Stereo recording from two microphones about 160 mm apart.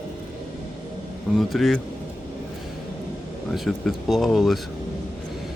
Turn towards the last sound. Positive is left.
turn(degrees=0)  # may be behind; listen again after turning